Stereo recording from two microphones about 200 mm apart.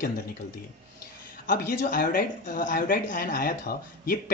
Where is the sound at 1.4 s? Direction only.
45° left (ahead or behind).